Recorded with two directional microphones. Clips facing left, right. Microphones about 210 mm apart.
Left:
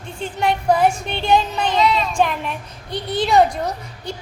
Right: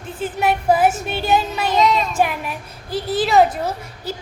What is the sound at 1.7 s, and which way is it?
Child singing, 45° right (ahead or behind).